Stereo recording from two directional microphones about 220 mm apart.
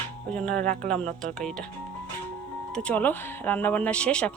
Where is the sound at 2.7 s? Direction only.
5° left (ahead or behind).